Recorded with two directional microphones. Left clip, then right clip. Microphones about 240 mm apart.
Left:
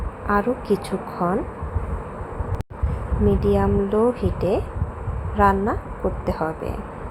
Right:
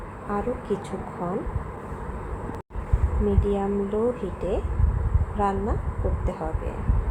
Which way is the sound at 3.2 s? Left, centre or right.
Centre.